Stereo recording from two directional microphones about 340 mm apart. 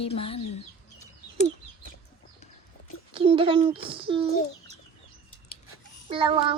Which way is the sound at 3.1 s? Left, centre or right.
Centre.